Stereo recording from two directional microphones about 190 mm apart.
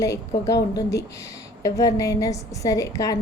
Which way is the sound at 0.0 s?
15° left (ahead or behind).